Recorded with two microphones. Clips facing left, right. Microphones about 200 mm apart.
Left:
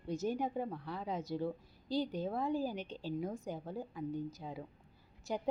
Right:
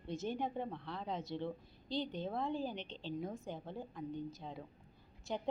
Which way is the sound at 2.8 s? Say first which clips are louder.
Left 4 dB; 45° left (ahead or behind).